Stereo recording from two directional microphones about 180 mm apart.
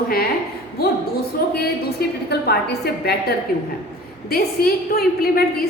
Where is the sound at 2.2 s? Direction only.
60° left (ahead or behind).